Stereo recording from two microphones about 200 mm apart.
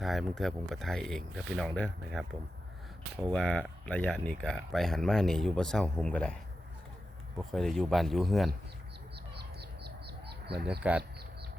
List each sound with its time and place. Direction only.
0.0 s speech: centre (ahead or behind)
3.2 s speech: 5° left (ahead or behind)
7.5 s speech: 5° left (ahead or behind)
9.1 s bird: 55° right (ahead or behind)